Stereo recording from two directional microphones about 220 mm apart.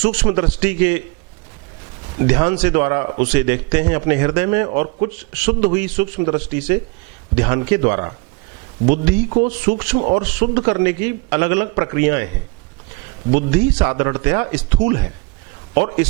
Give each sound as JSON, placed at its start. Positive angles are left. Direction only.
{"t": 0.0, "sound": "a man's voice", "side_deg": -10}
{"t": 2.1, "sound": "a man's voice", "side_deg": -15}
{"t": 13.3, "sound": "a man's voice", "side_deg": -10}